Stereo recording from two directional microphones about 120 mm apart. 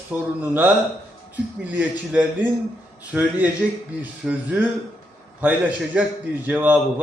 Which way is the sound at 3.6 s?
5° left (ahead or behind).